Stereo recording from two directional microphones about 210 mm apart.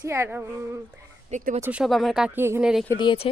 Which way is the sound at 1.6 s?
5° right (ahead or behind).